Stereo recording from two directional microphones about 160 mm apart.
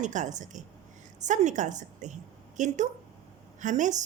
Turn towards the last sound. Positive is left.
turn(degrees=-50)  # may be behind; listen again after turning